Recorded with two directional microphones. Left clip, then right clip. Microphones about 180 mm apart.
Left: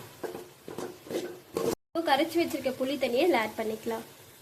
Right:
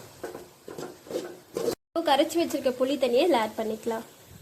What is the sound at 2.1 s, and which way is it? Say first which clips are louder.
A woman's voice: right 3 dB; 20° right (ahead or behind).